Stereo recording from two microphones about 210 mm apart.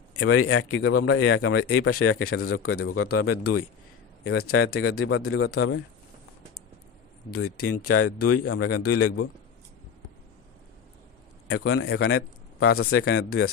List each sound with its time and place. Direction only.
0.2 s speech: 75° left (ahead or behind); by 1.7 s 55° left (ahead or behind)
1.9 s a man's voice: 85° left; by 5.5 s 65° left (ahead or behind)
7.3 s speech: 90° left
11.4 s speech: 55° left (ahead or behind)
12.2 s a sound: 50° left (ahead or behind)
12.7 s speech: 75° left (ahead or behind)